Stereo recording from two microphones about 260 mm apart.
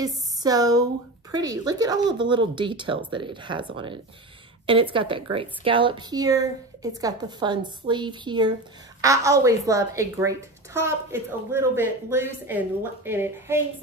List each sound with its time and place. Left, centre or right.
0.0 s a woman's voice: centre